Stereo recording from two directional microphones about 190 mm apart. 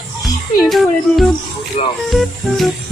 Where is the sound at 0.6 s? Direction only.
Centre (ahead or behind).